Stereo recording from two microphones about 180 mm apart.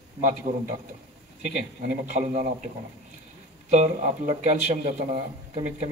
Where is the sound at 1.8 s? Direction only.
45° right (ahead or behind).